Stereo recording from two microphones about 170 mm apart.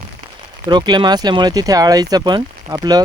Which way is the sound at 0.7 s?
25° right (ahead or behind).